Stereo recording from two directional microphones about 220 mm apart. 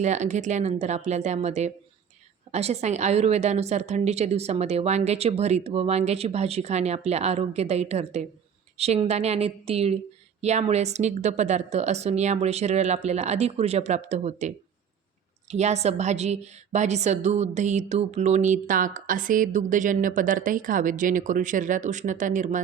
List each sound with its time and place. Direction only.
0.0 s a woman's voice: 30° right (ahead or behind)